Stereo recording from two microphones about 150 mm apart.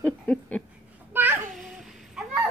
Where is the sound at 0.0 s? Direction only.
10° left (ahead or behind).